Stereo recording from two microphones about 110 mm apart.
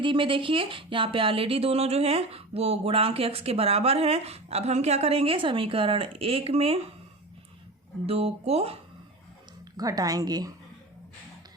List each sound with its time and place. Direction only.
0.0 s speech: 50° right (ahead or behind)
8.0 s speech: 65° right (ahead or behind)
9.7 s a woman's voice: 35° right (ahead or behind)